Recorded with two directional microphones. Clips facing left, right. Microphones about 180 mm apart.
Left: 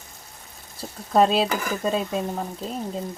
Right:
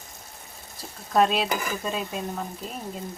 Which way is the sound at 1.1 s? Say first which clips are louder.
Left 3 dB; 30° left (ahead or behind).